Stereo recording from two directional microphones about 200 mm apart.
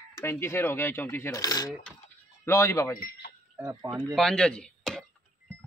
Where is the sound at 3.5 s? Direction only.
15° right (ahead or behind).